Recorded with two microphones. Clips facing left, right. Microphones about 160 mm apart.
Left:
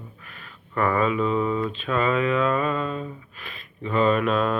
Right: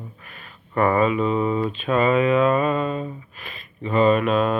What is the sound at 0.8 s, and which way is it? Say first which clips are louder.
Speech: right 4 dB; 20° right (ahead or behind).